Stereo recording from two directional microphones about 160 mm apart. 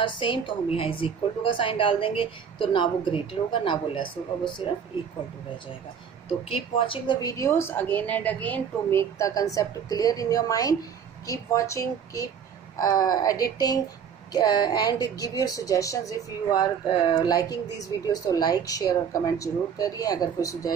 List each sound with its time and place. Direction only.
0.0 s a woman's voice: 30° left (ahead or behind)
6.5 s a woman's voice: 30° left (ahead or behind)